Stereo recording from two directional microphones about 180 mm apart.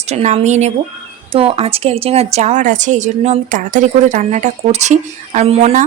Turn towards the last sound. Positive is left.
turn(degrees=-35)  # may be behind; listen again after turning